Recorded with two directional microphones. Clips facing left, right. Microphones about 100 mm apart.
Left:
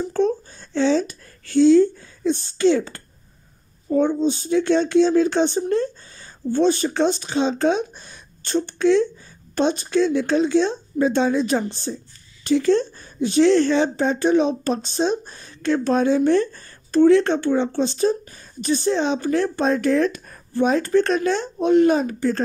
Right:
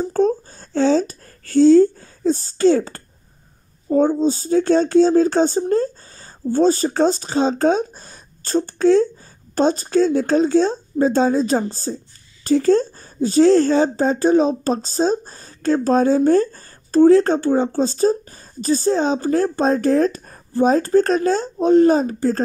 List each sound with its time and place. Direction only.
0.0 s speech: 40° right (ahead or behind)